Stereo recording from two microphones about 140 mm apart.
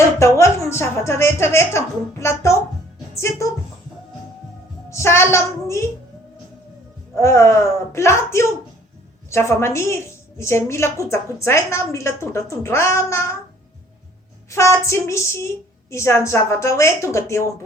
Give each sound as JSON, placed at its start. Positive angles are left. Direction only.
{"t": 0.2, "sound": "a woman's voice", "side_deg": 20}
{"t": 4.9, "sound": "a woman's voice", "side_deg": 20}
{"t": 7.2, "sound": "a woman's voice", "side_deg": 20}
{"t": 14.5, "sound": "a woman's voice", "side_deg": 20}